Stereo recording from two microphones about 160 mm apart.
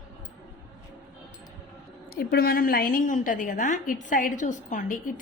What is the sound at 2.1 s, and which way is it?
A woman's voice, 70° left (ahead or behind).